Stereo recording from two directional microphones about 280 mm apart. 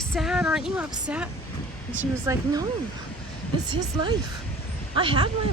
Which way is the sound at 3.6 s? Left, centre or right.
Centre.